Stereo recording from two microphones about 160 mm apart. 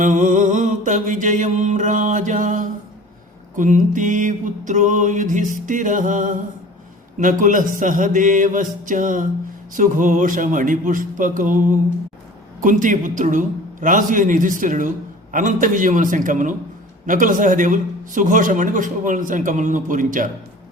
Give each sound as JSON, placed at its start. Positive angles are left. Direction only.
{"t": 0.0, "sound": "music", "side_deg": -55}
{"t": 9.7, "sound": "a man's voice", "side_deg": -55}
{"t": 12.6, "sound": "music", "side_deg": -55}
{"t": 17.1, "sound": "a man's voice", "side_deg": -55}